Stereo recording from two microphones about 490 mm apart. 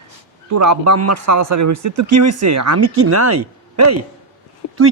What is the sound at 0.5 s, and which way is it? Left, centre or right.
Speech, right.